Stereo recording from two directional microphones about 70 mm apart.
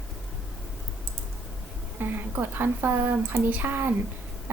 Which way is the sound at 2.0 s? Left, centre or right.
Right.